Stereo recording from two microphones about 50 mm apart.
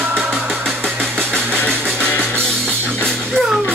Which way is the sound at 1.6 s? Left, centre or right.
Centre.